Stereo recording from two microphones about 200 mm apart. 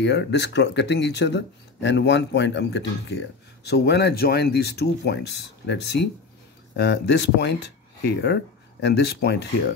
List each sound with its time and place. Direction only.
0.0 s speech: 60° left (ahead or behind)